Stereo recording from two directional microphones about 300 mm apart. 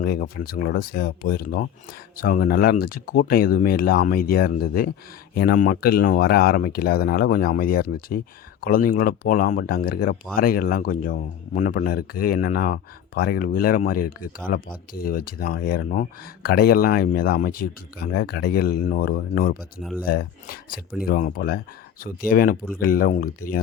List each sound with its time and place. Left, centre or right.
0.0 s speech: left
19.8 s speech: centre
20.1 s speech: left